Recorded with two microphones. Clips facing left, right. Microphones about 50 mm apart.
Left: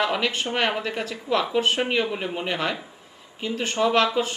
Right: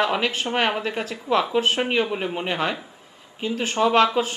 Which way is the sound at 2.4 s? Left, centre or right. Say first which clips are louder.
Right 2 dB; right.